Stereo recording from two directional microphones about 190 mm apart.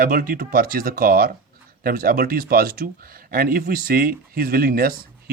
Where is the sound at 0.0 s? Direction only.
45° right (ahead or behind).